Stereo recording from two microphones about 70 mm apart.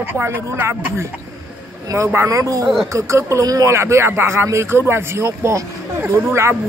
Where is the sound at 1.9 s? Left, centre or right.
Right.